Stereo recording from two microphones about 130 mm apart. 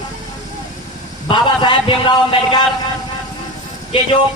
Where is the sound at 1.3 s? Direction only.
40° left (ahead or behind).